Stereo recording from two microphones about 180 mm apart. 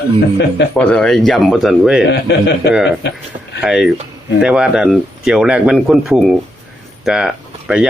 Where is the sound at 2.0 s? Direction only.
70° left (ahead or behind).